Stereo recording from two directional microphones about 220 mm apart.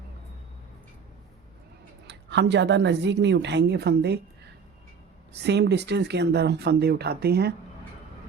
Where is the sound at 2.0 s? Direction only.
50° right (ahead or behind).